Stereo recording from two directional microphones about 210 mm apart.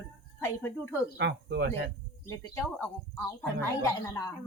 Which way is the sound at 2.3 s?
5° left (ahead or behind).